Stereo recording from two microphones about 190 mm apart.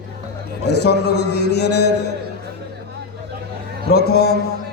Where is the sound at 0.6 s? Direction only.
60° left (ahead or behind).